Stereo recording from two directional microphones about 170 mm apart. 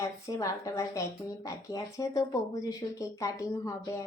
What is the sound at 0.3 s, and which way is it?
A woman's voice, 20° left (ahead or behind).